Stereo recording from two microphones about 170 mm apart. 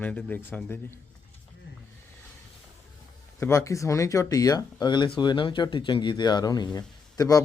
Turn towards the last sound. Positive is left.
turn(degrees=20)  # may be behind; listen again after turning